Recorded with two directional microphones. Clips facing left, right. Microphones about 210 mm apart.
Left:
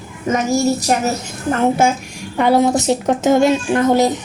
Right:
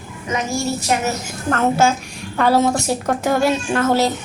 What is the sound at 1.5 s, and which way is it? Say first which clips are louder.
A woman's voice: left 2 dB; 15° left (ahead or behind).